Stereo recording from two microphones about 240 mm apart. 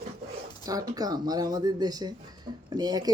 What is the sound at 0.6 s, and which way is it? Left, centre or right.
Speech, centre.